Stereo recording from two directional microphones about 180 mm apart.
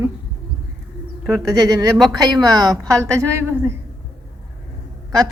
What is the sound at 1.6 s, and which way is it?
Speech, 20° right (ahead or behind).